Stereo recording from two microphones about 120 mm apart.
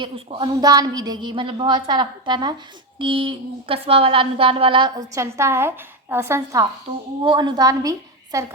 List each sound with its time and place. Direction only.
0.0 s a woman's voice: 45° right (ahead or behind)
4.9 s a woman's voice: 25° right (ahead or behind)
7.3 s a woman's voice: 40° right (ahead or behind)